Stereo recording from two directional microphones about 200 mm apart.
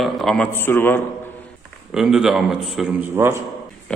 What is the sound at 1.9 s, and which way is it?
A man's voice, 5° right (ahead or behind).